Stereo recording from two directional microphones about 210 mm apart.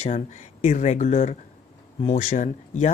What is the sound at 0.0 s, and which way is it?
Speech, 30° left (ahead or behind).